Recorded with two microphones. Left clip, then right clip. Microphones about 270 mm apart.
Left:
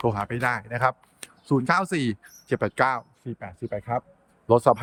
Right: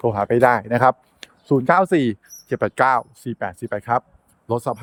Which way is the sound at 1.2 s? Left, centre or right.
Centre.